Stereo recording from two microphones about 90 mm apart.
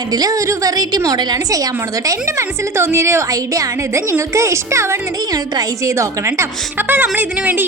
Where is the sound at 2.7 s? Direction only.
30° right (ahead or behind).